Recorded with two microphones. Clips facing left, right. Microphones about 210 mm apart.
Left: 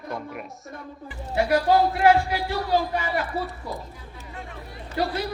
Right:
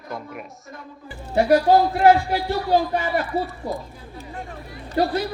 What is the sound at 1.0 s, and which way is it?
A woman's voice, 35° right (ahead or behind).